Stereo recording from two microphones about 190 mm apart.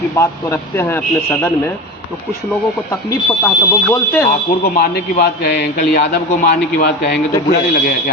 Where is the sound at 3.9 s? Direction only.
10° left (ahead or behind).